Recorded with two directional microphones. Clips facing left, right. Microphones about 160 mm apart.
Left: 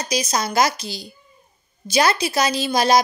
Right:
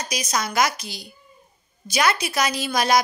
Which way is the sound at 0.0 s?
30° left (ahead or behind).